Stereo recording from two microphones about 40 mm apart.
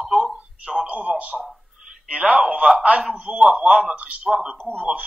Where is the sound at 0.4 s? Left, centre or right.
Right.